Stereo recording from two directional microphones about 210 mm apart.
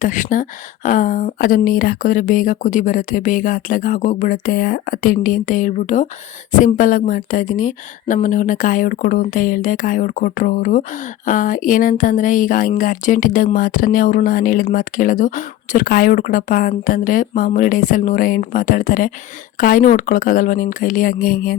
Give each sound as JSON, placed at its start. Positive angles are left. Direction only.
{"t": 0.0, "sound": "speech", "side_deg": 40}